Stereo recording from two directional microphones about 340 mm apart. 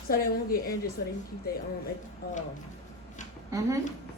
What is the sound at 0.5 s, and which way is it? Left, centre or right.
Speech, left.